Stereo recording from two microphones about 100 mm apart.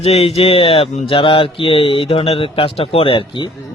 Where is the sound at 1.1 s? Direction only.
60° left (ahead or behind).